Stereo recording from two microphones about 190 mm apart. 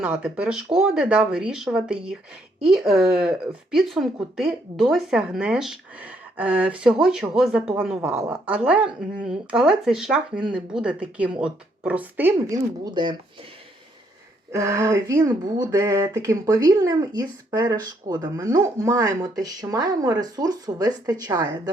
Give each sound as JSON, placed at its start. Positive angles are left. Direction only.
{"t": 0.0, "sound": "speech", "side_deg": -5}
{"t": 14.5, "sound": "speech", "side_deg": -15}